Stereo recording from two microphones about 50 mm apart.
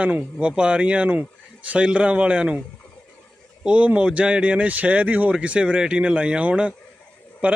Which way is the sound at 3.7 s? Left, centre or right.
Right.